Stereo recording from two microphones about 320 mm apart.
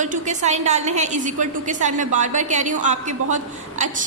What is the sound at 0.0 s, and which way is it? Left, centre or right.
A woman's voice, right.